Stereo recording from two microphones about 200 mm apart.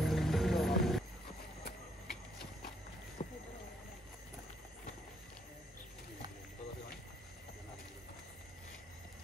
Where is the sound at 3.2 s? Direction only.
40° left (ahead or behind).